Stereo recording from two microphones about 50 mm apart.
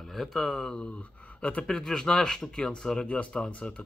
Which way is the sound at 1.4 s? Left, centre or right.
Left.